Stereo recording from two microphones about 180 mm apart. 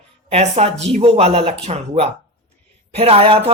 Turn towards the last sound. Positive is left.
turn(degrees=-30)  # may be behind; listen again after turning